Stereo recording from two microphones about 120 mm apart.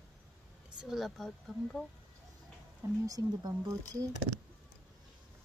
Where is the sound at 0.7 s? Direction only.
Centre (ahead or behind).